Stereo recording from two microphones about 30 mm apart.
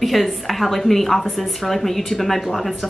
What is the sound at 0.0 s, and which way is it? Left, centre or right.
Speech, centre.